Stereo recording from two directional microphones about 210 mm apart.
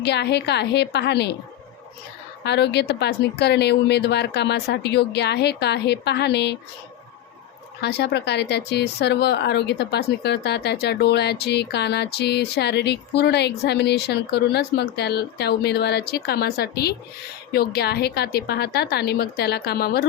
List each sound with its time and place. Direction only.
0.0 s speech: 55° left (ahead or behind)
2.4 s speech: 55° left (ahead or behind)
7.8 s speech: 50° left (ahead or behind)